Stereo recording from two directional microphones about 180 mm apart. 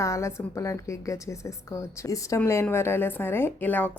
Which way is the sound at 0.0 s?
15° left (ahead or behind).